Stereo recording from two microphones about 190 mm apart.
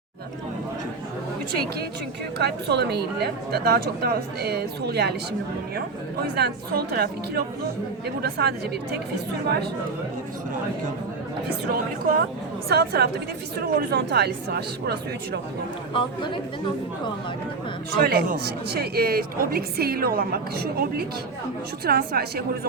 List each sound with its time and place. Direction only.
2.4 s speech: 60° right (ahead or behind)
6.2 s speech: 55° right (ahead or behind)
11.7 s a woman's voice: 50° right (ahead or behind)
15.9 s speech: 25° left (ahead or behind)
18.0 s a woman's voice: 55° right (ahead or behind)